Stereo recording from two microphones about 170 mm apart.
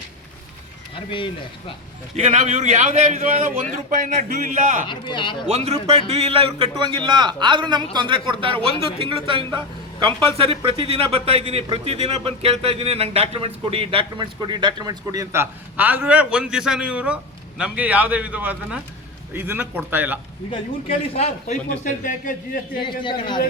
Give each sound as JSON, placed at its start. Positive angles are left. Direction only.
{"t": 0.9, "sound": "speech", "side_deg": 30}
{"t": 2.1, "sound": "a man's voice", "side_deg": -45}
{"t": 4.9, "sound": "a man's voice", "side_deg": 25}
{"t": 5.5, "sound": "a man's voice", "side_deg": -35}
{"t": 21.2, "sound": "a man's voice", "side_deg": 40}
{"t": 22.8, "sound": "a man's voice", "side_deg": 30}